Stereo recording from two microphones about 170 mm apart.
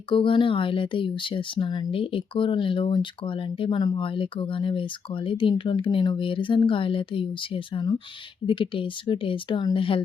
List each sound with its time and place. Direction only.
0.1 s speech: 30° left (ahead or behind)